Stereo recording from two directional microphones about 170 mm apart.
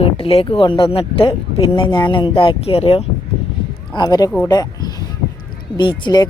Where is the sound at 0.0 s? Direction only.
35° left (ahead or behind).